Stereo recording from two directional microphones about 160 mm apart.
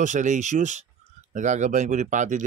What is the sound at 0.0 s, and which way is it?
Speech, 50° right (ahead or behind).